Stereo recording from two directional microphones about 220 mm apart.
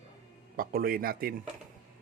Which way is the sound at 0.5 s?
40° right (ahead or behind).